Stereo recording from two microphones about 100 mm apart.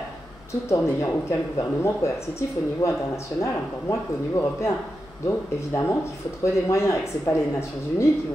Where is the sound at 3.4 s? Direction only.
30° left (ahead or behind).